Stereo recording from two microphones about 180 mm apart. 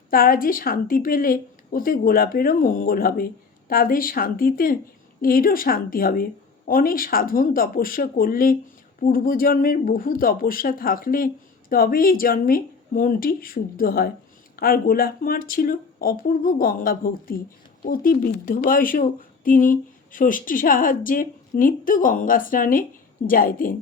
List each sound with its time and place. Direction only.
0.1 s a woman's voice: 50° left (ahead or behind)